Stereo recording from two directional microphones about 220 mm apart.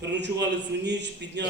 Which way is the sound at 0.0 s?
50° right (ahead or behind).